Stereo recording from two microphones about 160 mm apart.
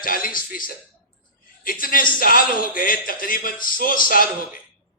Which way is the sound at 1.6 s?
60° left (ahead or behind).